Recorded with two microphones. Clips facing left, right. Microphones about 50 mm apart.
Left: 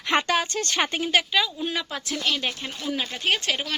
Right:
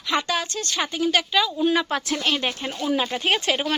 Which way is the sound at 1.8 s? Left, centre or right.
Right.